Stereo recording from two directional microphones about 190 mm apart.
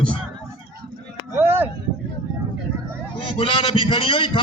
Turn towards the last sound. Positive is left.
turn(degrees=25)  # may be behind; listen again after turning